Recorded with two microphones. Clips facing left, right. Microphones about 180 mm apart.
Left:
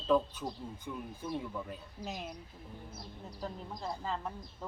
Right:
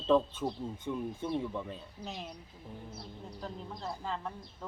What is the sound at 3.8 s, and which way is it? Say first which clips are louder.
Speech: left 1 dB; 5° left (ahead or behind).